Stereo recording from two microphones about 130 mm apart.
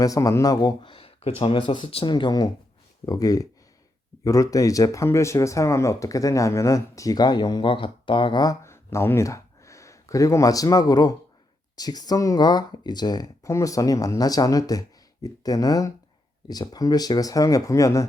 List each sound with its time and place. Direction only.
0.0 s speech: 25° left (ahead or behind)